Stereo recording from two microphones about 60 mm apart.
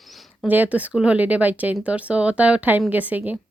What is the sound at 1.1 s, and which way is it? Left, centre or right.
A woman's voice, right.